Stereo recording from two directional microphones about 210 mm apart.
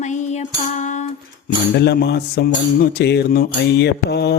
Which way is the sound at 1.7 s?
55° left (ahead or behind).